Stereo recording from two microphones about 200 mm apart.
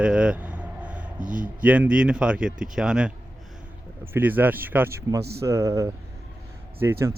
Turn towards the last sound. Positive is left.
turn(degrees=-10)  # may be behind; listen again after turning